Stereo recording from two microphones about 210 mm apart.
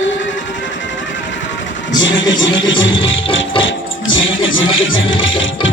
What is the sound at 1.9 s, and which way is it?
Speech, 60° left (ahead or behind).